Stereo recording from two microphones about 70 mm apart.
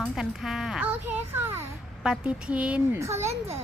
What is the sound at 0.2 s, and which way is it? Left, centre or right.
Speech, centre.